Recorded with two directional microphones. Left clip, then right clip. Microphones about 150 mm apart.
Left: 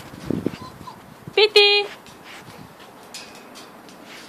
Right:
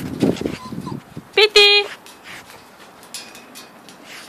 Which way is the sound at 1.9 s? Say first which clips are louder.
Right 3 dB; 50° right (ahead or behind).